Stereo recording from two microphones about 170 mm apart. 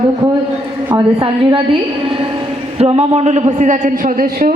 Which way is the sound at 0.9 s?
25° right (ahead or behind).